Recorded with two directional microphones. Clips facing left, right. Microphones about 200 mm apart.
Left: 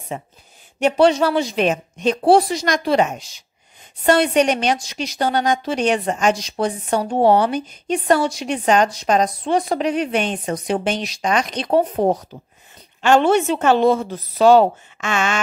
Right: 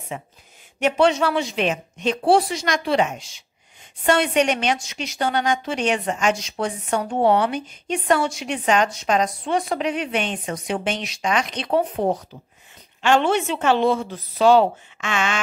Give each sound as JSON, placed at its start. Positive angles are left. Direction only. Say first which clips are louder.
{"t": 0.1, "sound": "a woman's voice", "louder": "left 3 dB", "side_deg": 35}